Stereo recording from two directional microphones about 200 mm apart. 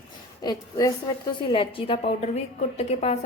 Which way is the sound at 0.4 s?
20° left (ahead or behind).